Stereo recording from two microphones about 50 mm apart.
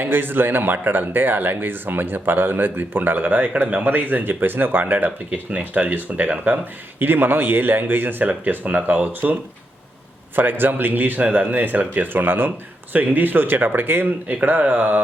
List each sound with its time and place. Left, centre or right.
0.0 s speech: right
10.3 s speech: right